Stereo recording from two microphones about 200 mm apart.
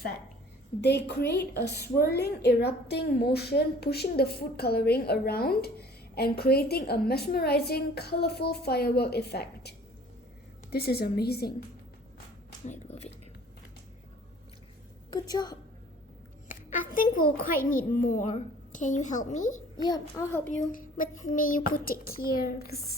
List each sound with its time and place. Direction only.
0.8 s a woman's voice: 55° left (ahead or behind)
12.6 s a child's voice: 35° left (ahead or behind)
15.1 s a woman's voice: 20° left (ahead or behind)
16.5 s a child's voice: 40° left (ahead or behind)
19.8 s a child's voice: 15° left (ahead or behind)
20.7 s a woman's voice: 40° left (ahead or behind)